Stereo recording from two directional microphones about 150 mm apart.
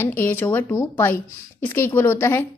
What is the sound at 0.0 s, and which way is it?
Speech, 15° left (ahead or behind).